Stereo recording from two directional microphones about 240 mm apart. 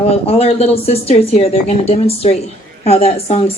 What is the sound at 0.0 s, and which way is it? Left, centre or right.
A woman's voice, left.